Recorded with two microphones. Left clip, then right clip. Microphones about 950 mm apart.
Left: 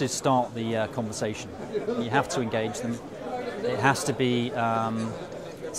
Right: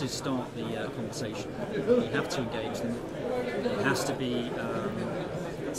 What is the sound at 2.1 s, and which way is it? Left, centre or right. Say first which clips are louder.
Speech: left 6 dB; left.